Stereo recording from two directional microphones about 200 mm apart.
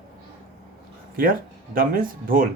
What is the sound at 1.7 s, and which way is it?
Speech, 45° right (ahead or behind).